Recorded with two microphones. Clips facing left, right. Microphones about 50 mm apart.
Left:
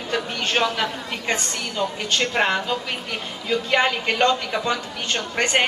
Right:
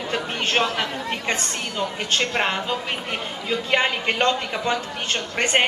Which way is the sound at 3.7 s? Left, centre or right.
Right.